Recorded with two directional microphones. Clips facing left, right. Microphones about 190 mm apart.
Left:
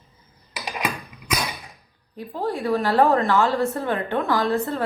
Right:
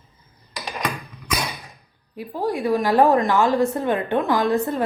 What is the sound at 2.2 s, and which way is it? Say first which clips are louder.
A woman's voice: right 2 dB; 10° right (ahead or behind).